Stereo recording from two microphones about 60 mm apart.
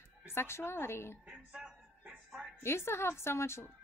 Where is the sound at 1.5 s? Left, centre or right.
Centre.